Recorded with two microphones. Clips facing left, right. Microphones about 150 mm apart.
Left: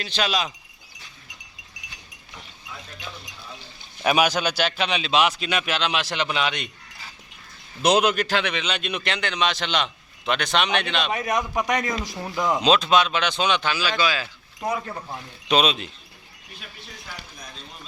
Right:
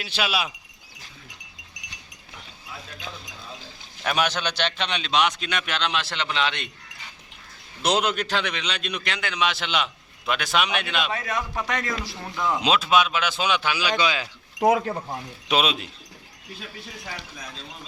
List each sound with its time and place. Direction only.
0.0 s speech: 10° right (ahead or behind)
4.0 s a man's voice: 10° left (ahead or behind)
7.8 s a man's voice: 20° left (ahead or behind)
8.1 s a man's voice: 5° left (ahead or behind)
11.1 s a man's voice: 20° left (ahead or behind)
12.6 s speech: 10° right (ahead or behind)
14.6 s speech: 75° right (ahead or behind)
15.4 s a man's voice: 5° right (ahead or behind)